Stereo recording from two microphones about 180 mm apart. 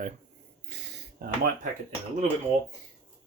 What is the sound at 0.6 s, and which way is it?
Speech, 60° right (ahead or behind).